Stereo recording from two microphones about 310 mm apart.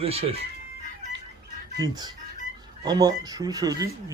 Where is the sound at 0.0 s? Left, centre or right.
Centre.